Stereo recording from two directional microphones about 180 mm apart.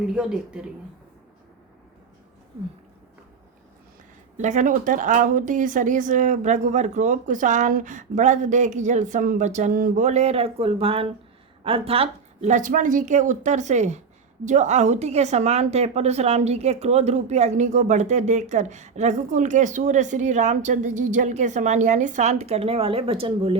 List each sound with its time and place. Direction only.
0.0 s speech: 5° right (ahead or behind)
4.4 s a woman's voice: 45° right (ahead or behind)